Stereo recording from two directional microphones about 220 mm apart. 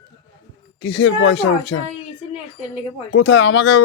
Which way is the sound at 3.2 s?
50° left (ahead or behind).